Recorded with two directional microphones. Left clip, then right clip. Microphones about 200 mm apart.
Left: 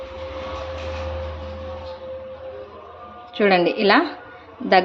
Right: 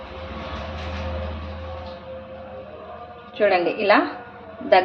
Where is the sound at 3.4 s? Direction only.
45° left (ahead or behind).